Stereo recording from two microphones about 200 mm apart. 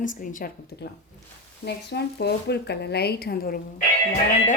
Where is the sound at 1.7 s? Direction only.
55° left (ahead or behind).